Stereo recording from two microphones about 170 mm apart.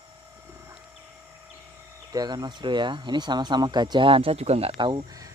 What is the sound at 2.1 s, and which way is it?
Speech, 25° right (ahead or behind).